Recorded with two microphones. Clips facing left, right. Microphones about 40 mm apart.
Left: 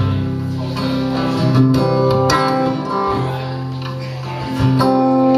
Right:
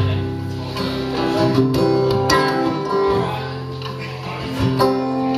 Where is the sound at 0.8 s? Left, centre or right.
Left.